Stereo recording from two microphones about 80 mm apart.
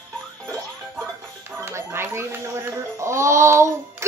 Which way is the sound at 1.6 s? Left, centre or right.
Right.